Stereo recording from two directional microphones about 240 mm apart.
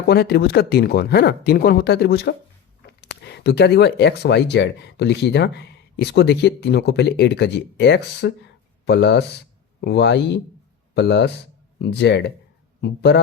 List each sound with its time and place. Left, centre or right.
0.1 s speech: left